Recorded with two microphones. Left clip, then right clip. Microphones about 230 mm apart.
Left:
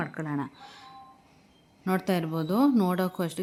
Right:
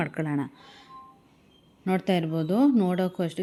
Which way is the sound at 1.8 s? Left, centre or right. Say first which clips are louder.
Right 2 dB; centre.